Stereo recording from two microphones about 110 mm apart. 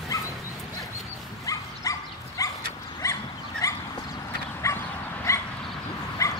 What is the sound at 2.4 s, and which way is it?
Dog, 30° left (ahead or behind).